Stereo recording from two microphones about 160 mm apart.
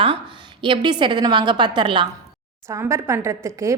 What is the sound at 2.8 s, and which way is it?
Speech, 15° right (ahead or behind).